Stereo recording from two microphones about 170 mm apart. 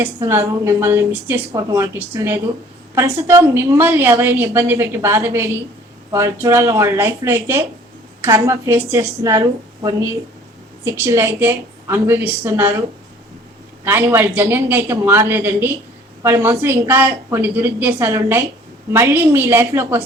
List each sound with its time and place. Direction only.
0.0 s a woman's voice: 15° right (ahead or behind)
13.8 s a woman's voice: 15° right (ahead or behind)